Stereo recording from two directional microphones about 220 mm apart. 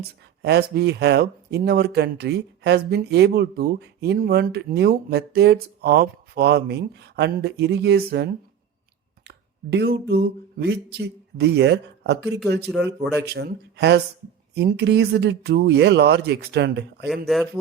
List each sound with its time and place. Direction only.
0.4 s speech: 45° right (ahead or behind)
17.2 s speech: centre (ahead or behind)